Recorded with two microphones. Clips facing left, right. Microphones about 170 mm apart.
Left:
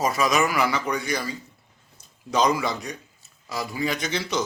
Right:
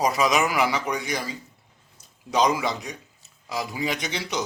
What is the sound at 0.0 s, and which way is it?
A man's voice, 20° right (ahead or behind).